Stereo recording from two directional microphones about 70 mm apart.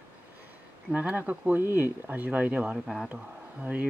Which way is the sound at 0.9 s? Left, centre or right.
Right.